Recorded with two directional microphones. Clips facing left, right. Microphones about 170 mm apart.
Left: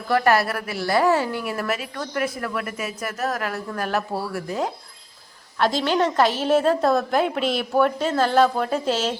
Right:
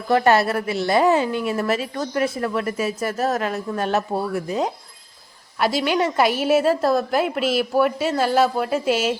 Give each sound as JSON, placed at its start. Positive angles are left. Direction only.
{"t": 0.1, "sound": "a woman's voice", "side_deg": -25}
{"t": 5.5, "sound": "a woman's voice", "side_deg": -10}